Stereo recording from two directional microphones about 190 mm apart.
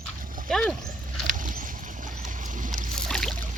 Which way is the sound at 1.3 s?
45° right (ahead or behind).